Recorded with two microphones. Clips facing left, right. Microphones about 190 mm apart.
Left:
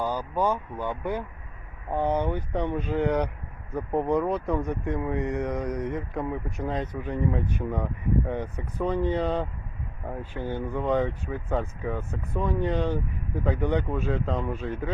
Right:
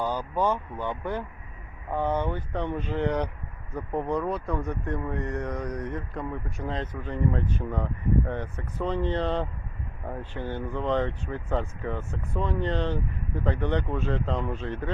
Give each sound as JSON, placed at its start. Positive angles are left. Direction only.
{"t": 0.0, "sound": "speech", "side_deg": 10}